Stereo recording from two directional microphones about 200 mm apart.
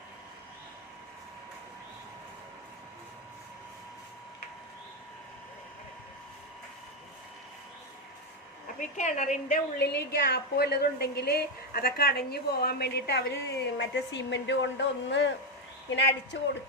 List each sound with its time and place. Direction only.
8.6 s a woman's voice: 35° left (ahead or behind)
9.7 s a woman's voice: 55° left (ahead or behind)